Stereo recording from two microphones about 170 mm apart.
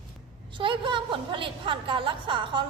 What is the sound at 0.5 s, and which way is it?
A woman's voice, 30° right (ahead or behind).